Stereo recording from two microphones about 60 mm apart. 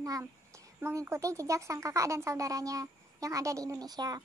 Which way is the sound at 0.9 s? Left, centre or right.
Right.